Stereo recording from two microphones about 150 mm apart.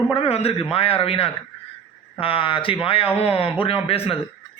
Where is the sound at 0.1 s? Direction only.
40° left (ahead or behind).